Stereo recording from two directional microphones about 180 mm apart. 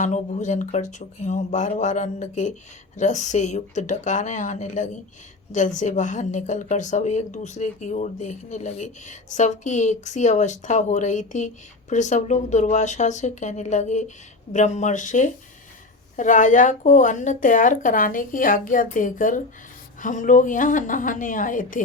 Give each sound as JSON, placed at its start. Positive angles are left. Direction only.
{"t": 0.0, "sound": "a woman's voice", "side_deg": 40}